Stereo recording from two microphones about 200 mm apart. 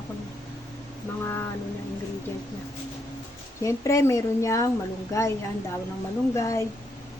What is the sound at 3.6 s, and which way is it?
Speech, 15° left (ahead or behind).